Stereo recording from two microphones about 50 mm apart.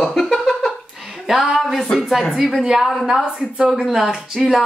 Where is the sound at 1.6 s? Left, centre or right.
Centre.